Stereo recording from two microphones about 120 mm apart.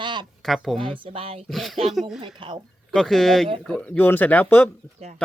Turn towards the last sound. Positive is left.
turn(degrees=15)  # may be behind; listen again after turning